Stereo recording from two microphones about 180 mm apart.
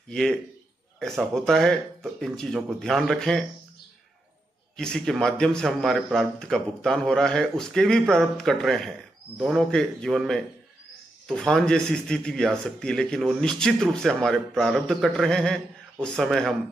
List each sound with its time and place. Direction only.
0.1 s speech: 5° left (ahead or behind)
4.7 s speech: 5° left (ahead or behind)